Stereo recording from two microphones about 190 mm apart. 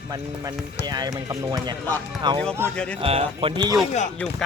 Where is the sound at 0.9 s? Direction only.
20° right (ahead or behind).